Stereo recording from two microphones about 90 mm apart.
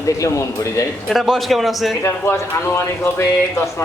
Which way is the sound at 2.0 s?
30° left (ahead or behind).